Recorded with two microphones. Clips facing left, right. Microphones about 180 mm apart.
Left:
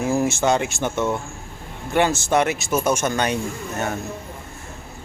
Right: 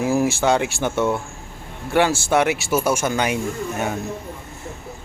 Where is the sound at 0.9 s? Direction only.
10° right (ahead or behind).